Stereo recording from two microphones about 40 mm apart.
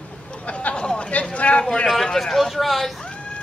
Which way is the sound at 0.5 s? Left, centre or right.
Left.